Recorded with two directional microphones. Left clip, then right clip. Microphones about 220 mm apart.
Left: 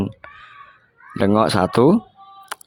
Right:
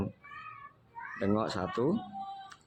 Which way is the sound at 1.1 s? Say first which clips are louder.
Left 16 dB; 45° left (ahead or behind).